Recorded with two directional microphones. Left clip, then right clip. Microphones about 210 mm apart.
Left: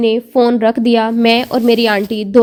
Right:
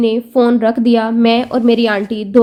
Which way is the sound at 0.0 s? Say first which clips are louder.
Left 1 dB; 30° left (ahead or behind).